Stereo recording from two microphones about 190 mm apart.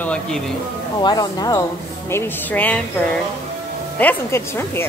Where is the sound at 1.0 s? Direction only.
20° left (ahead or behind).